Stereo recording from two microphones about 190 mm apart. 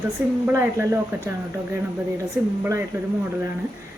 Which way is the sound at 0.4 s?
10° right (ahead or behind).